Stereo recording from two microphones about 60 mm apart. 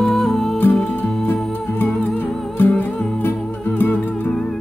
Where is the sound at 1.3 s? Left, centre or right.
Left.